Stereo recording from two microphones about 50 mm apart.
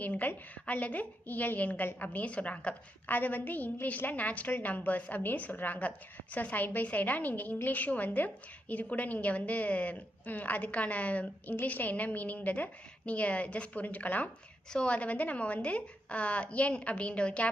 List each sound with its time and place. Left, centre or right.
0.0 s a woman's voice: left
14.7 s a woman's voice: left